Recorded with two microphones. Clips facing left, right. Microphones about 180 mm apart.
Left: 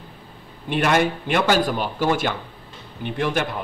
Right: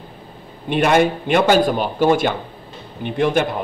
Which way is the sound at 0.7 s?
20° right (ahead or behind).